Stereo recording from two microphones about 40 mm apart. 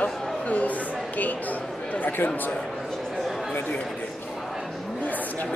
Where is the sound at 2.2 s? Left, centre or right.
Left.